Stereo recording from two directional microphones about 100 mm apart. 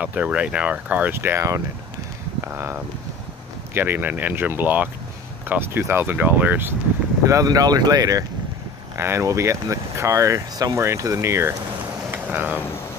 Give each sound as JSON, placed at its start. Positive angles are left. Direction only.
{"t": 0.0, "sound": "speech", "side_deg": -15}
{"t": 7.2, "sound": "speech", "side_deg": -35}
{"t": 12.1, "sound": "a sound", "side_deg": -15}